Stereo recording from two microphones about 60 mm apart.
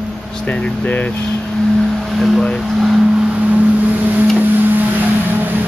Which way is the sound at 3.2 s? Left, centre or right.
Right.